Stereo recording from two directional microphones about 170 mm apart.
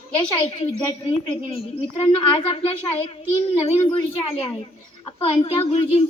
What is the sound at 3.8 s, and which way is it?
Speech, 35° left (ahead or behind).